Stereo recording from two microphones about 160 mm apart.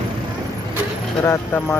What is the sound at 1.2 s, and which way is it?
Speech, 15° left (ahead or behind).